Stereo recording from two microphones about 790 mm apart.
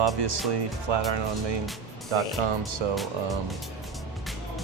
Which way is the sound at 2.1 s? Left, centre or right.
Right.